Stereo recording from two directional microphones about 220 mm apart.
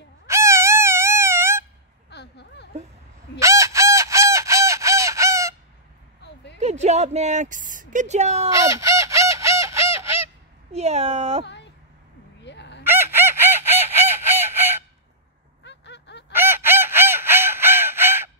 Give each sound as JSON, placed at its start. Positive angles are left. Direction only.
{"t": 0.3, "sound": "wail", "side_deg": -10}
{"t": 2.0, "sound": "a sound", "side_deg": 50}
{"t": 3.3, "sound": "fowl", "side_deg": -15}
{"t": 6.6, "sound": "speech", "side_deg": -30}
{"t": 8.5, "sound": "fowl", "side_deg": -15}
{"t": 10.7, "sound": "speech", "side_deg": -30}
{"t": 11.4, "sound": "a sound", "side_deg": 50}
{"t": 12.4, "sound": "chicken", "side_deg": 50}
{"t": 12.8, "sound": "chicken", "side_deg": -10}
{"t": 15.6, "sound": "a sound", "side_deg": 50}
{"t": 16.3, "sound": "chicken", "side_deg": -10}